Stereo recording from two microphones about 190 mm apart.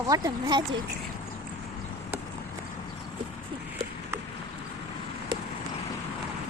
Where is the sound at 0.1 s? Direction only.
20° right (ahead or behind).